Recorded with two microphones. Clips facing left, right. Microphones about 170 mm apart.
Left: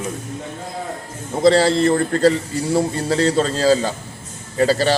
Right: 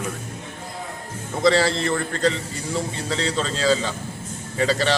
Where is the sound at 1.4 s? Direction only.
35° left (ahead or behind).